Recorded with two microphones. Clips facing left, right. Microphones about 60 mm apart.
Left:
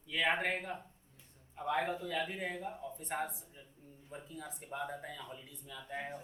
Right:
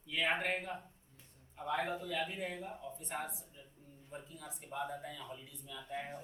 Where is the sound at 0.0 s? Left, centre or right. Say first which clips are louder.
Left 2 dB; left.